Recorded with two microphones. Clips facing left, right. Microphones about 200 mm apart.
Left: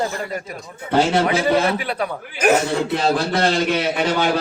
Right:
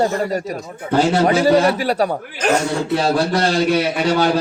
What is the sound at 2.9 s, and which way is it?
Speech, 40° right (ahead or behind).